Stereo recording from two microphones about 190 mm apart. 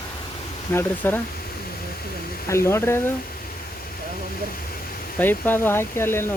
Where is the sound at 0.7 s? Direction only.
10° left (ahead or behind).